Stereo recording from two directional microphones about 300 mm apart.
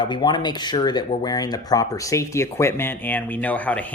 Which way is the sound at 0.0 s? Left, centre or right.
Centre.